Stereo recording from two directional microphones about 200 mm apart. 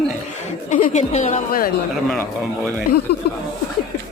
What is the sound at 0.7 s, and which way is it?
A woman's voice, 35° left (ahead or behind).